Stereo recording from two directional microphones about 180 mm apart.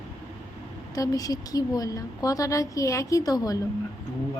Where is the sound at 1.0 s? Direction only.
20° left (ahead or behind).